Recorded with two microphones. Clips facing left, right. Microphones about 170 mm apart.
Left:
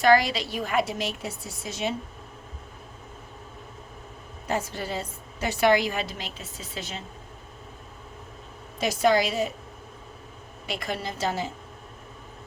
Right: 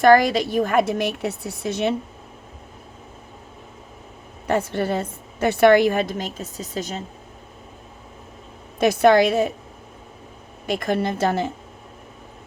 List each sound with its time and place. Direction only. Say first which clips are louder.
0.0 s a woman's voice: right 6 dB; 50° right (ahead or behind)
4.4 s a woman's voice: right 8 dB; 60° right (ahead or behind); by 7.0 s 45° right (ahead or behind)
8.8 s a woman's voice: right 7 dB; 60° right (ahead or behind)
10.7 s a woman's voice: right 9 dB; 50° right (ahead or behind)